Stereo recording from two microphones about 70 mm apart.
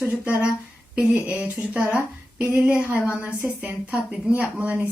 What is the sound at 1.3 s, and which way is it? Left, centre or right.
Speech, centre.